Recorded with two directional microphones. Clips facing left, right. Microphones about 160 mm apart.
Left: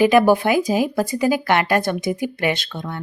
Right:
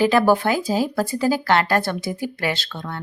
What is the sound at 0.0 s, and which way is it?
Speech, 15° left (ahead or behind).